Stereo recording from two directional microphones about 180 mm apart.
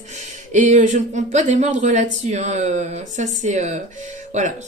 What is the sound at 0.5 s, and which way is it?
Speech, 45° right (ahead or behind).